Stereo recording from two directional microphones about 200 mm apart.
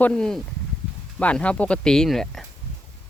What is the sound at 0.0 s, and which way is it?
Speech, 5° left (ahead or behind).